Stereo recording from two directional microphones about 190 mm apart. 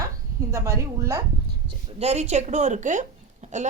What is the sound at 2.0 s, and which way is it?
A woman's voice, 35° right (ahead or behind).